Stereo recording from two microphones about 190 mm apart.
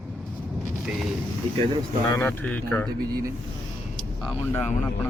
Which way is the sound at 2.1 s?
10° left (ahead or behind).